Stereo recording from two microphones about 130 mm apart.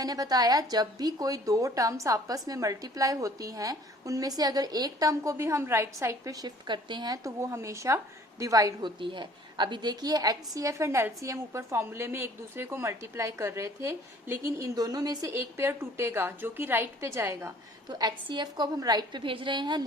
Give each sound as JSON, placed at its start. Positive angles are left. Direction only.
{"t": 0.0, "sound": "a woman's voice", "side_deg": -30}
{"t": 9.0, "sound": "a woman's voice", "side_deg": -40}
{"t": 17.8, "sound": "a woman's voice", "side_deg": -30}